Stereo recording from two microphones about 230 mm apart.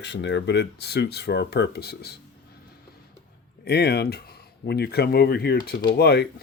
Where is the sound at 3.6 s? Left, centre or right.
Left.